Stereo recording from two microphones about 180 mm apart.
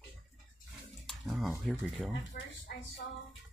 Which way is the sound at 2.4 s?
50° left (ahead or behind).